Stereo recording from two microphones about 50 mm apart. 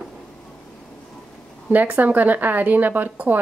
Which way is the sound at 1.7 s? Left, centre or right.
Right.